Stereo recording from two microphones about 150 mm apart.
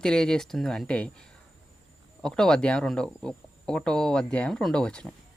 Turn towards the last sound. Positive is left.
turn(degrees=5)  # may be behind; listen again after turning